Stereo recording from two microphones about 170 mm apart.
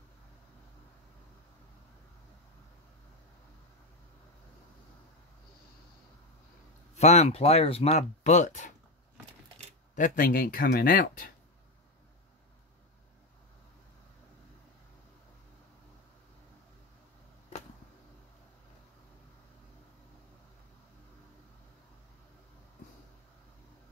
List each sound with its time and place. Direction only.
7.0 s speech: 40° left (ahead or behind)
9.9 s speech: 55° left (ahead or behind)